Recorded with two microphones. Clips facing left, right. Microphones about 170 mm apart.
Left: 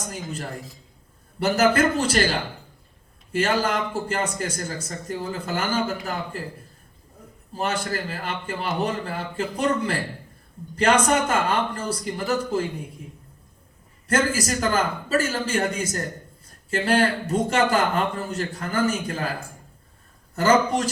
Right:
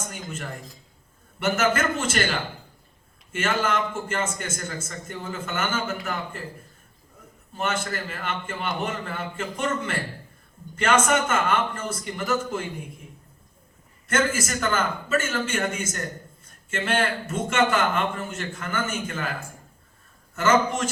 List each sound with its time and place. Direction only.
0.1 s a man's voice: 35° left (ahead or behind)
7.5 s a man's voice: 35° left (ahead or behind)
14.1 s a man's voice: 35° left (ahead or behind)
20.3 s a man's voice: 35° left (ahead or behind)